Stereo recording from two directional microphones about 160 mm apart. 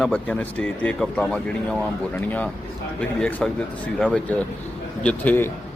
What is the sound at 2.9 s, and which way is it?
Speech, 5° left (ahead or behind).